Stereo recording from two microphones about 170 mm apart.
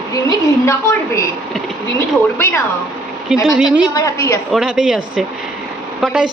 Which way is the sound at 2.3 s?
15° left (ahead or behind).